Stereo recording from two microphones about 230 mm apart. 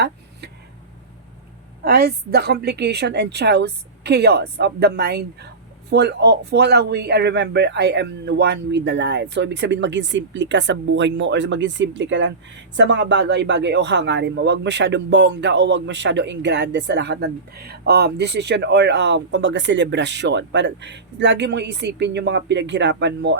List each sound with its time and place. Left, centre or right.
1.8 s speech: right